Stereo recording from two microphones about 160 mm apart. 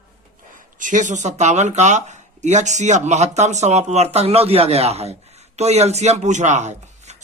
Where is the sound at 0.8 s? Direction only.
50° right (ahead or behind).